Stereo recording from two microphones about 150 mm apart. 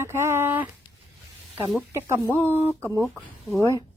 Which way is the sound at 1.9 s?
15° right (ahead or behind).